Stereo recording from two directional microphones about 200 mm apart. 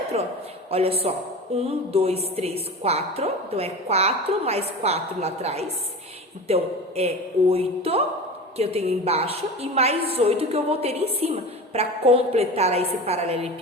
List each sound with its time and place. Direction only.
0.1 s a woman's voice: 30° right (ahead or behind)